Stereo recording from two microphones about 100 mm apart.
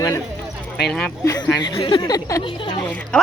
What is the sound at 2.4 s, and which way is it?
Speech, 55° left (ahead or behind).